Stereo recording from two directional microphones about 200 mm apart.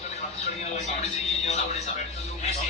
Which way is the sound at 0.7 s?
35° left (ahead or behind).